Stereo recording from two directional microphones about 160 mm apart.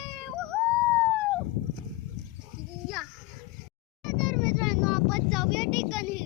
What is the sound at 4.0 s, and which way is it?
Vehicle, centre (ahead or behind).